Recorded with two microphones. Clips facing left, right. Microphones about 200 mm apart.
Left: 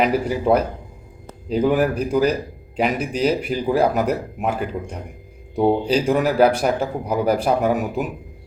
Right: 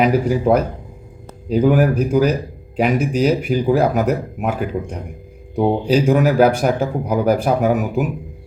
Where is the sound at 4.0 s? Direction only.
5° right (ahead or behind).